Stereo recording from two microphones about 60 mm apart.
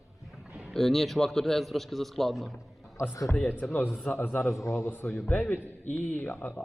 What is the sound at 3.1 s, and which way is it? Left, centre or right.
Speech, left.